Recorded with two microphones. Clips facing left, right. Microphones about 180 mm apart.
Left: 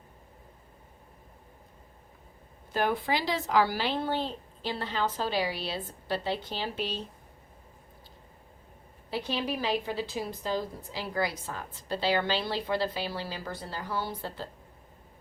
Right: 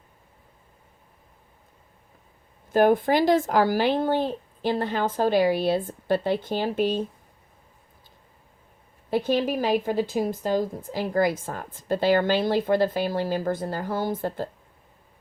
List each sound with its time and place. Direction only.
2.7 s a woman's voice: 50° right (ahead or behind)
9.0 s a woman's voice: 50° right (ahead or behind)